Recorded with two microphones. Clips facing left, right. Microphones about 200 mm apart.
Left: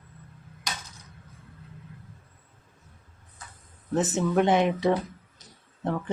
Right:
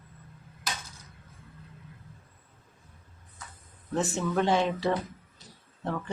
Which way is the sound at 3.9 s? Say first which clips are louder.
Left 4 dB; 20° left (ahead or behind).